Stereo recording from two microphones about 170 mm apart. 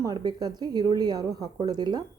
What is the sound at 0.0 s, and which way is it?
A woman's voice, 25° right (ahead or behind).